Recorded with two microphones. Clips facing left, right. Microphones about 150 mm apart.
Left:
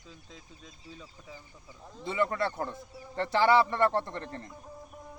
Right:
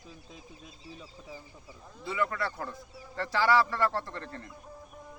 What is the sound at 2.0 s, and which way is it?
A man's voice, 25° left (ahead or behind).